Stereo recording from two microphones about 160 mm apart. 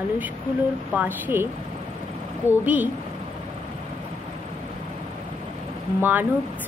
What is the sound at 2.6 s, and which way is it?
Speech, 10° right (ahead or behind).